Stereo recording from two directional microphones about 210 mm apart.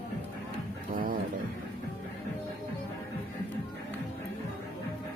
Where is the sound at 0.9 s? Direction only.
40° right (ahead or behind).